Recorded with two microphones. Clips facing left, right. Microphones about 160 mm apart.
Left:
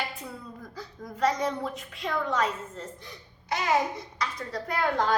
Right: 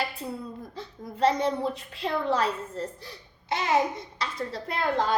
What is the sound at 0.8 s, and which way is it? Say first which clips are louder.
A child's voice: right 2 dB; 30° right (ahead or behind).